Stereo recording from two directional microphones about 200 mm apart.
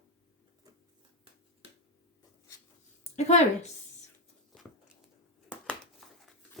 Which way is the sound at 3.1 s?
35° left (ahead or behind).